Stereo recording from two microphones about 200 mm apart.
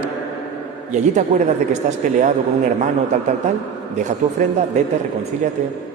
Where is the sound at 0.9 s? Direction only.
35° right (ahead or behind).